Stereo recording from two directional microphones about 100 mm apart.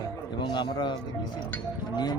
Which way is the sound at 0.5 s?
50° left (ahead or behind).